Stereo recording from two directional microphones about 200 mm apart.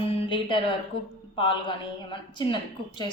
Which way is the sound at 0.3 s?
25° left (ahead or behind).